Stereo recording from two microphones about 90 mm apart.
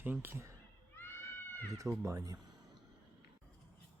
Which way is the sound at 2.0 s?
30° right (ahead or behind).